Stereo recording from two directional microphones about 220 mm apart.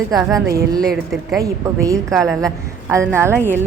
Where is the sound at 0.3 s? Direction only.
15° right (ahead or behind).